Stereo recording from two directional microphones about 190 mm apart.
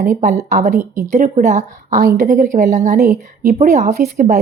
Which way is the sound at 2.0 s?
55° right (ahead or behind).